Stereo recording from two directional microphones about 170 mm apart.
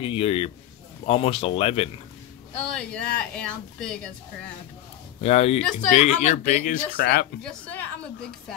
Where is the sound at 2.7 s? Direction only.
5° left (ahead or behind).